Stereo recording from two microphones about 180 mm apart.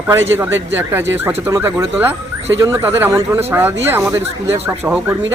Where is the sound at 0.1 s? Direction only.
10° right (ahead or behind).